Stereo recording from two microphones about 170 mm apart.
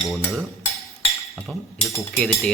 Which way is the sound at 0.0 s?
Centre (ahead or behind).